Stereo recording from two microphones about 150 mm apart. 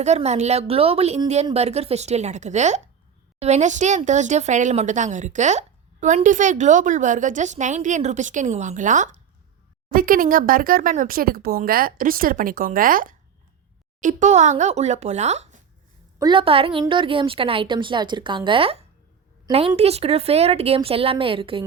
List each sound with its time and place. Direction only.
0.0 s a woman's voice: 50° right (ahead or behind)
9.9 s speech: 70° right (ahead or behind)
14.0 s speech: 55° right (ahead or behind)
16.1 s speech: 30° right (ahead or behind)